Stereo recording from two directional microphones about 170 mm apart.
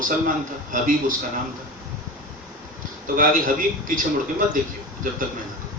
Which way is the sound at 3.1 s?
50° right (ahead or behind).